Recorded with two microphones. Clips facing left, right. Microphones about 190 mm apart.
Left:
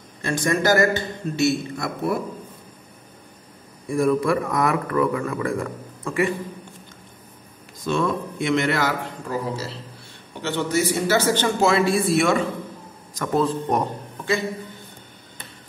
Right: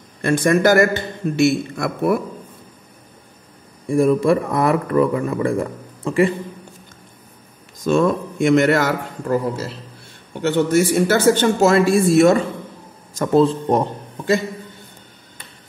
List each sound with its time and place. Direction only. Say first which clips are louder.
0.2 s a man's voice: right 7 dB; 55° right (ahead or behind)
3.8 s speech: right 5 dB; 25° right (ahead or behind)
7.8 s a man's voice: right 6 dB; 45° right (ahead or behind)
13.1 s speech: right 6 dB; 30° right (ahead or behind)